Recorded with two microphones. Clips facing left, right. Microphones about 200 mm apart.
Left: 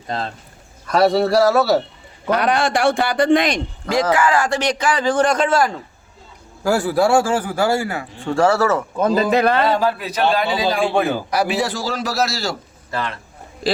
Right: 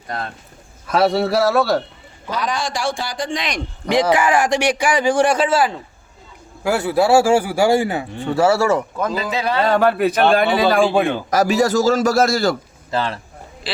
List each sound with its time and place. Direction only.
0.1 s speech: 25° left (ahead or behind)
0.9 s a man's voice: centre (ahead or behind)
2.3 s speech: 60° left (ahead or behind)
3.8 s a man's voice: 15° right (ahead or behind)
8.2 s a man's voice: 5° right (ahead or behind)
9.1 s speech: 50° left (ahead or behind)
9.6 s speech: 55° right (ahead or behind)
10.9 s a man's voice: centre (ahead or behind)
11.3 s a man's voice: 45° right (ahead or behind)
12.9 s a man's voice: 30° right (ahead or behind)